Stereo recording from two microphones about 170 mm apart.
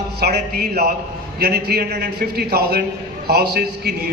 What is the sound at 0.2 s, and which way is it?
A man's voice, 70° right (ahead or behind).